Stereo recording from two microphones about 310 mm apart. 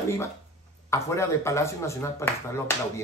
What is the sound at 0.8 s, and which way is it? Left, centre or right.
Speech, centre.